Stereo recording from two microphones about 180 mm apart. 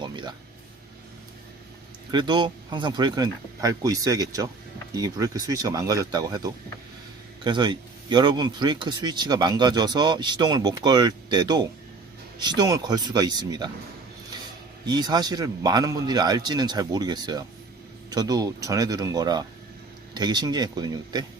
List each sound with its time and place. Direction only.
0.0 s a sound: 25° right (ahead or behind)
2.0 s speech: 25° right (ahead or behind)
14.8 s speech: 25° right (ahead or behind)